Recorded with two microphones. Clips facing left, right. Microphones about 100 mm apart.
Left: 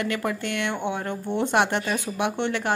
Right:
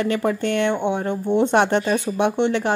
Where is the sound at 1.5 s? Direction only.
30° right (ahead or behind).